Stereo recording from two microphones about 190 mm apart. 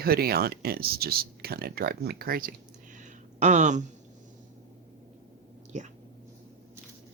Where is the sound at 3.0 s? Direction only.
40° right (ahead or behind).